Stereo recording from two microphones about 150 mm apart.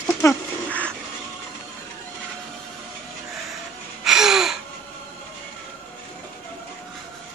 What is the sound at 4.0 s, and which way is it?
Gasp, 5° right (ahead or behind).